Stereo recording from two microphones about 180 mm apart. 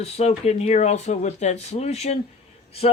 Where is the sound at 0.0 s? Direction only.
35° left (ahead or behind).